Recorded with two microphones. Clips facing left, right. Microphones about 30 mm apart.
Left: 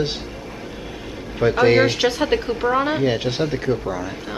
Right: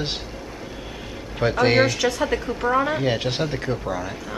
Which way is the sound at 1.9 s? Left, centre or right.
Left.